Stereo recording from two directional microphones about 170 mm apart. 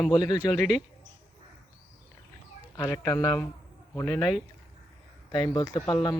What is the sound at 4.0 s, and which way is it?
Speech, 20° left (ahead or behind).